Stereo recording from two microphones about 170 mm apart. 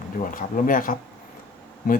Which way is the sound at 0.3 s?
55° left (ahead or behind).